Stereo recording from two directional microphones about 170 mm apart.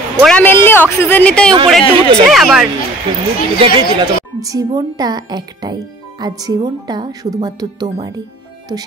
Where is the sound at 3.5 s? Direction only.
30° right (ahead or behind).